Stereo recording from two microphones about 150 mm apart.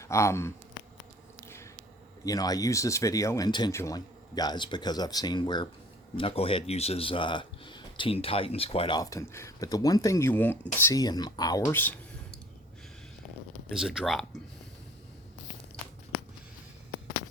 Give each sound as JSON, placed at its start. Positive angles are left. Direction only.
{"t": 0.0, "sound": "speech", "side_deg": 20}
{"t": 1.5, "sound": "a sound", "side_deg": 20}
{"t": 2.2, "sound": "speech", "side_deg": 25}
{"t": 9.0, "sound": "speech", "side_deg": 20}
{"t": 10.8, "sound": "speech", "side_deg": 25}
{"t": 13.7, "sound": "speech", "side_deg": 0}